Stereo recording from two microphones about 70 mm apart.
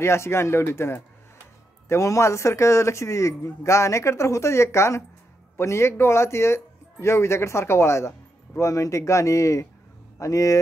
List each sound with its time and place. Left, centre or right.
0.0 s speech: left
1.9 s a man's voice: left